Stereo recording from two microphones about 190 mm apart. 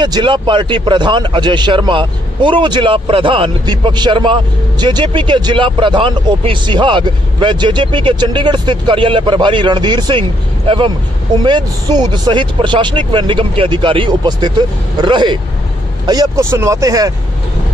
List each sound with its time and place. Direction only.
0.0 s a man's voice: 25° right (ahead or behind)
11.3 s a man's voice: 20° right (ahead or behind)